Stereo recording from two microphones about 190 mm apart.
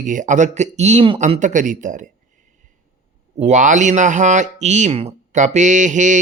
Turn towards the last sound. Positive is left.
turn(degrees=-40)  # may be behind; listen again after turning